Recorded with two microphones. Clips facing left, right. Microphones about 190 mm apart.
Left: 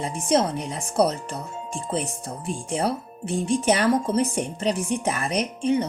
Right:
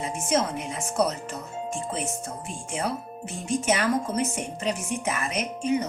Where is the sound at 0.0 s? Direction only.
35° left (ahead or behind).